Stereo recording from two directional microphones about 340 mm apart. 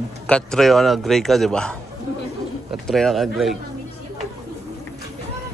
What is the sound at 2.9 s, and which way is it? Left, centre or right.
Speech, centre.